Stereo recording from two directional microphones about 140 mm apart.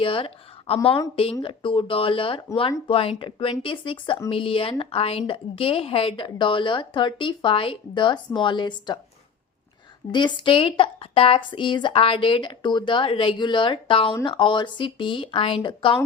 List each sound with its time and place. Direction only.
0.0 s speech: 40° left (ahead or behind)
10.1 s speech: 35° left (ahead or behind)